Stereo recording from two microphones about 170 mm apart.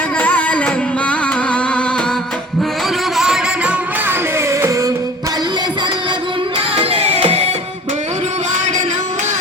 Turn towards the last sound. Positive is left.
turn(degrees=-35)  # may be behind; listen again after turning